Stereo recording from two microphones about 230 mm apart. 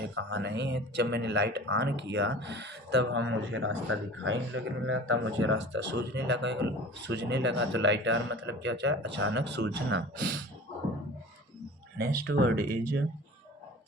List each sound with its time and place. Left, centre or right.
0.0 s speech: right
11.9 s speech: right
12.2 s speech: right